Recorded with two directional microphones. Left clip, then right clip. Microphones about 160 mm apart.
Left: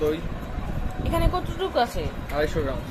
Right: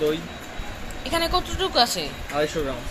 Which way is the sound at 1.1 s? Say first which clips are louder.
Right 4 dB; 10° left (ahead or behind).